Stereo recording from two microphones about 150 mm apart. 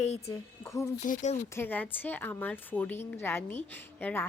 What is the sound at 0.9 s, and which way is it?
Speech, 55° left (ahead or behind).